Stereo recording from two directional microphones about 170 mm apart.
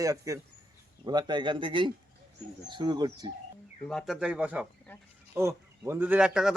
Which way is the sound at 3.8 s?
5° left (ahead or behind).